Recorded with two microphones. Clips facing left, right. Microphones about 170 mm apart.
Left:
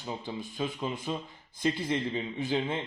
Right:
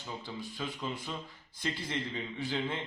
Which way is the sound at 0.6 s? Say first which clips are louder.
Left 6 dB; 20° left (ahead or behind).